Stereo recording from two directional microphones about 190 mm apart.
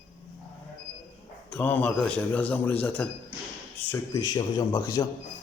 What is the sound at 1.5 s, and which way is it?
Speech, 10° left (ahead or behind).